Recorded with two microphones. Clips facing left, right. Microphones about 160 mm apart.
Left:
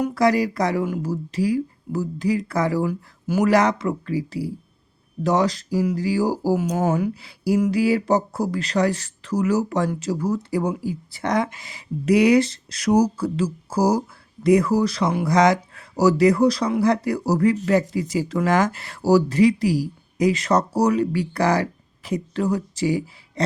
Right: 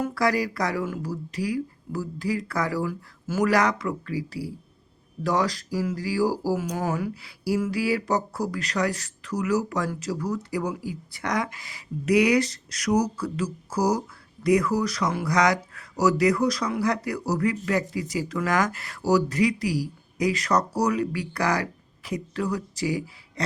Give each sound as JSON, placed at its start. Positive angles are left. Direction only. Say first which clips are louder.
{"t": 0.0, "sound": "speech", "louder": "left 5 dB", "side_deg": 20}